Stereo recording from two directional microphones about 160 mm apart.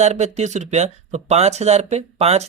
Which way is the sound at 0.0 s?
45° right (ahead or behind).